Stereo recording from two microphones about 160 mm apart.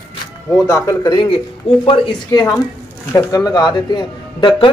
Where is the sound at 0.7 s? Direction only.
20° left (ahead or behind).